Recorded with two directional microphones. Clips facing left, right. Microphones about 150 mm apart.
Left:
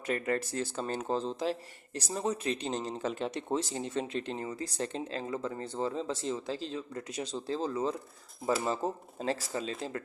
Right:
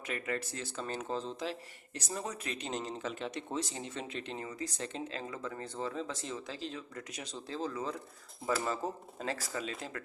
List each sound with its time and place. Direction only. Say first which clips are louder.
0.1 s speech: left 6 dB; 40° left (ahead or behind)